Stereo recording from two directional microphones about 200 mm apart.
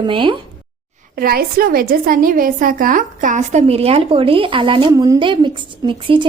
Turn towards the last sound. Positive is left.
turn(degrees=-25)  # may be behind; listen again after turning